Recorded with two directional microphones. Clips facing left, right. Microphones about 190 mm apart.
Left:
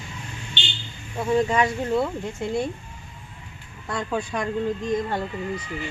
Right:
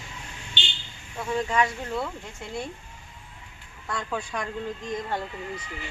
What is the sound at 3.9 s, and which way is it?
Speech, 15° left (ahead or behind).